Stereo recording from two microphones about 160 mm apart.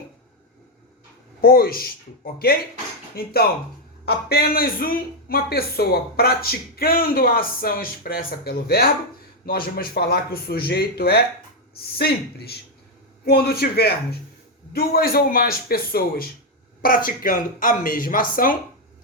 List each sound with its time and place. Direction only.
1.4 s a man's voice: 70° left (ahead or behind)
4.0 s a man's voice: 80° left
14.7 s a man's voice: 70° left (ahead or behind)